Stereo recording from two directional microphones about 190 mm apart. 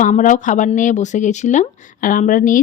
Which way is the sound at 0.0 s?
40° left (ahead or behind).